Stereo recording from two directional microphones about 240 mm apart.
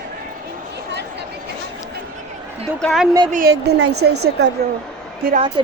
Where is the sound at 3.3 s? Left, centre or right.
Right.